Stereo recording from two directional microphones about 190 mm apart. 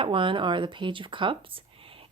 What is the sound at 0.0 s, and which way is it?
Speech, 25° right (ahead or behind).